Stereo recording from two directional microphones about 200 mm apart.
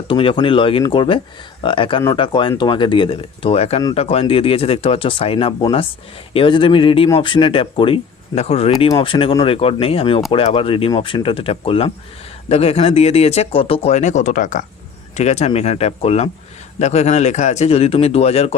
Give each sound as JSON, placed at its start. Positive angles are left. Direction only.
{"t": 0.1, "sound": "speech", "side_deg": 25}